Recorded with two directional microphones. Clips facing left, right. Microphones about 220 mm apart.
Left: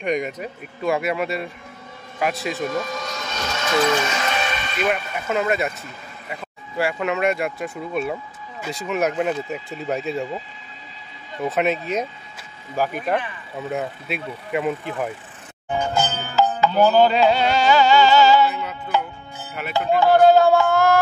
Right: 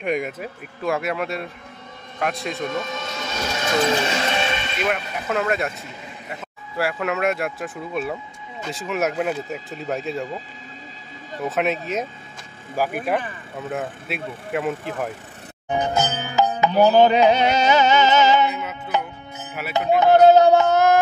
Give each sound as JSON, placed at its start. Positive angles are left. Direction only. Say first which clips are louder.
{"t": 0.0, "sound": "speech", "louder": "left 1 dB", "side_deg": -5}
{"t": 3.6, "sound": "music", "louder": "left 1 dB", "side_deg": -25}
{"t": 4.8, "sound": "speech", "louder": "left 2 dB", "side_deg": 0}
{"t": 11.4, "sound": "speech", "louder": "left 2 dB", "side_deg": 0}
{"t": 15.7, "sound": "music", "louder": "right 1 dB", "side_deg": -20}
{"t": 20.0, "sound": "a sound", "louder": "right 1 dB", "side_deg": -20}